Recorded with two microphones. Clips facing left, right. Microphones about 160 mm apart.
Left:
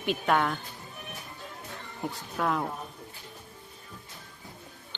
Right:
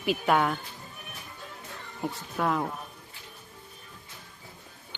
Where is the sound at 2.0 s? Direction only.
Centre (ahead or behind).